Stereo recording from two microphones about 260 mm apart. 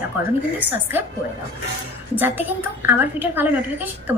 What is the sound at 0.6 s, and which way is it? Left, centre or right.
Speech, centre.